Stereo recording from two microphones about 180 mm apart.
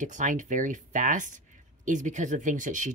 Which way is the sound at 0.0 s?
45° right (ahead or behind).